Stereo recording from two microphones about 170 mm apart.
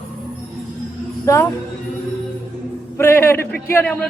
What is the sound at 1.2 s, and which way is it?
Speech, 15° left (ahead or behind).